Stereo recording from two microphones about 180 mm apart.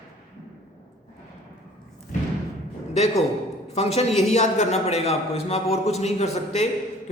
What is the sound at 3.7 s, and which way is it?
A man's voice, 35° left (ahead or behind).